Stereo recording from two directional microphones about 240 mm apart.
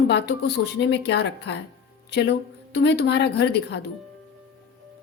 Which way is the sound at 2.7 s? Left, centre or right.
Left.